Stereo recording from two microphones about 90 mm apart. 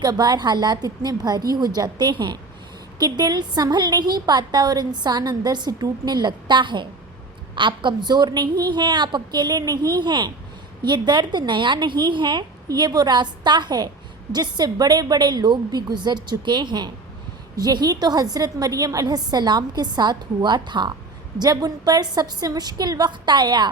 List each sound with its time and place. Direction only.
0.0 s a woman's voice: 45° right (ahead or behind)
10.0 s a woman's voice: 55° right (ahead or behind)
12.6 s a woman's voice: 45° right (ahead or behind)
21.3 s a woman's voice: 45° right (ahead or behind)